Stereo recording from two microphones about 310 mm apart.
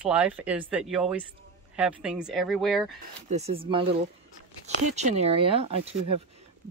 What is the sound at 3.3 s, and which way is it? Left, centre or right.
Speech, centre.